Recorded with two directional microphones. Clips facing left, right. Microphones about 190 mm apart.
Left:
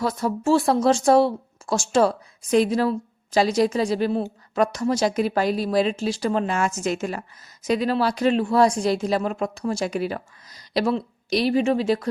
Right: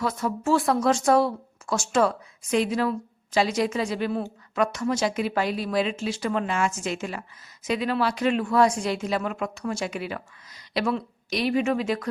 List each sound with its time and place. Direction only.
0.0 s speech: 35° left (ahead or behind)